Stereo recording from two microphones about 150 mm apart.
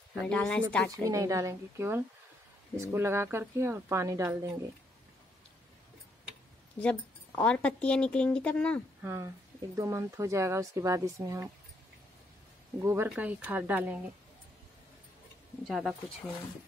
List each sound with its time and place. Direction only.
0.2 s speech: 5° left (ahead or behind)
1.0 s speech: 20° right (ahead or behind)
6.8 s speech: 5° left (ahead or behind)
9.0 s speech: 15° right (ahead or behind)
12.7 s speech: 15° right (ahead or behind)
15.6 s speech: 5° right (ahead or behind)